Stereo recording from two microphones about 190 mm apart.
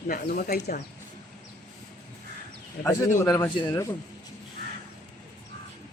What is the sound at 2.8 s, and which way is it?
A man's voice, 15° left (ahead or behind).